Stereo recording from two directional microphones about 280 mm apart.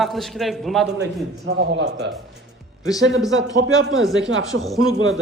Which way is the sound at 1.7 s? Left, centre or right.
Right.